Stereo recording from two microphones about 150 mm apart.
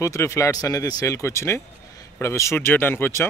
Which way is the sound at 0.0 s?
20° left (ahead or behind).